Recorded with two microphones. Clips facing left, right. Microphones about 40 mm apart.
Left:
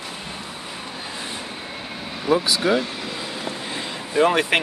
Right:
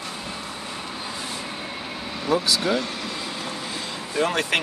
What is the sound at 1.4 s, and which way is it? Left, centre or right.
Vehicle, centre.